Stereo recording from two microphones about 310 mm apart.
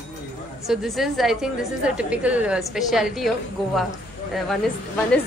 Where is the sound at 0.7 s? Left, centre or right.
Centre.